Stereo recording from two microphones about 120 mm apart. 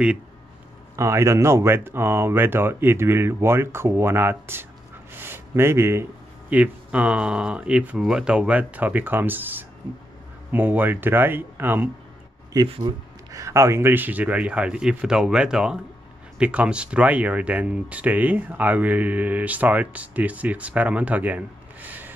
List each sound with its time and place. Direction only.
0.9 s speech: 25° right (ahead or behind)
6.5 s speech: 10° right (ahead or behind)
12.6 s speech: 50° right (ahead or behind)
13.3 s speech: 25° right (ahead or behind)